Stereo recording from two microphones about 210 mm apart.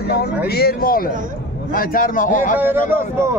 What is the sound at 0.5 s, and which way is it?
A man's voice, 50° left (ahead or behind).